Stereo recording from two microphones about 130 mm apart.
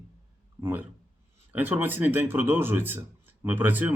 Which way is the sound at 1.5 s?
15° right (ahead or behind).